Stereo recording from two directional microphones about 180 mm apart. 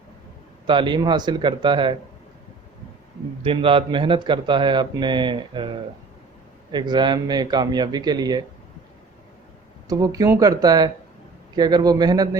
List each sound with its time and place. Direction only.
0.7 s speech: 25° right (ahead or behind)
3.4 s speech: 30° right (ahead or behind)
9.9 s speech: 20° right (ahead or behind)